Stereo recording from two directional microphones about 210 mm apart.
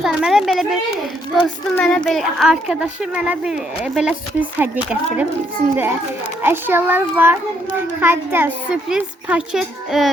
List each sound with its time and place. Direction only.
0.0 s speech: centre (ahead or behind)
6.4 s a child's voice: 10° right (ahead or behind)